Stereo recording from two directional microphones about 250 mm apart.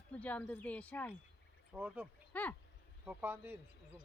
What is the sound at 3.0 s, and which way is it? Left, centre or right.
Speech, centre.